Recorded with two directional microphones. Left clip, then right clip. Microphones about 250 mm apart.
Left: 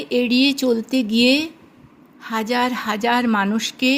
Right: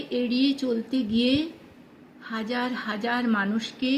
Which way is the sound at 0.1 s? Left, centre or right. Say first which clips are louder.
Left 8 dB; left.